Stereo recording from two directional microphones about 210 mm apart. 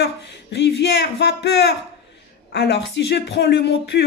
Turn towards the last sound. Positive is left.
turn(degrees=55)  # may be behind; listen again after turning